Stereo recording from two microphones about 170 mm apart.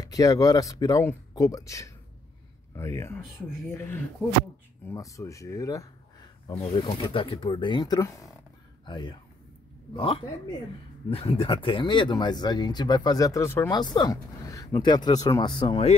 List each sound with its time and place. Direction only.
0.0 s speech: 20° left (ahead or behind)
6.5 s speech: 30° left (ahead or behind)